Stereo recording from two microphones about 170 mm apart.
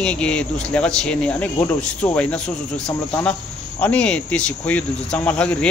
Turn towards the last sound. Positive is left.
turn(degrees=5)  # may be behind; listen again after turning